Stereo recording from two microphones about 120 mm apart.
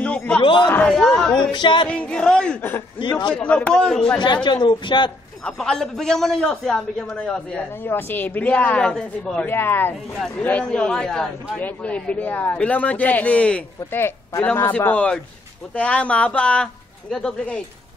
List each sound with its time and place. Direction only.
0.0 s a sound: 10° left (ahead or behind)
0.4 s speech: 40° left (ahead or behind)
0.7 s a man's voice: 10° left (ahead or behind)
1.5 s speech: 40° left (ahead or behind)
1.9 s a man's voice: 10° left (ahead or behind)
3.0 s speech: 40° left (ahead or behind)
3.3 s a man's voice: 10° left (ahead or behind)
4.2 s speech: 40° left (ahead or behind)
5.4 s a man's voice: 5° left (ahead or behind)
9.5 s a man's voice: 20° left (ahead or behind)